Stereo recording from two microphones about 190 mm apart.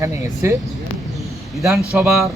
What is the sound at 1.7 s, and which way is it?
Speech, 5° right (ahead or behind).